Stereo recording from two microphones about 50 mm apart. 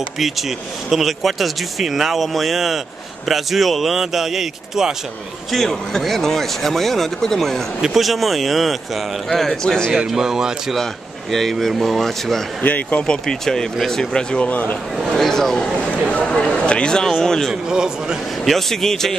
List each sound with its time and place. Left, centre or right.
0.2 s speech: centre
5.5 s speech: centre
9.9 s speech: centre
10.7 s speech: centre
12.6 s speech: left
13.0 s speech: centre
14.4 s speech: left
15.1 s speech: centre
17.6 s speech: centre
18.4 s speech: centre